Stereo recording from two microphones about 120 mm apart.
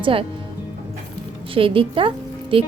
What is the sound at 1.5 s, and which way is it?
Speech, 50° right (ahead or behind).